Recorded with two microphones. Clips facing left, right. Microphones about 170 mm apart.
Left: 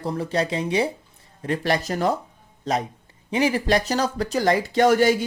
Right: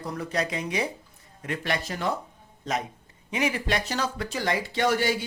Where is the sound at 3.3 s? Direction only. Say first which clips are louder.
Left 6 dB; 35° left (ahead or behind).